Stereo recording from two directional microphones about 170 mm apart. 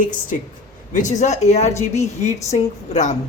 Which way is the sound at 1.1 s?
45° left (ahead or behind).